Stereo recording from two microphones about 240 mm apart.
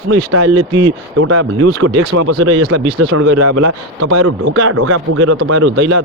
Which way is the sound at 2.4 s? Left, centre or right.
Right.